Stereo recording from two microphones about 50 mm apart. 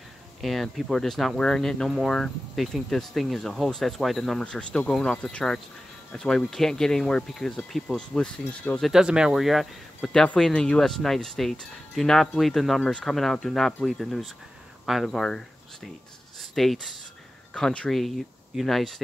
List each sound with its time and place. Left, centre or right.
0.4 s speech: centre
4.2 s speech: centre
8.9 s speech: centre
9.3 s speech: centre
10.2 s speech: centre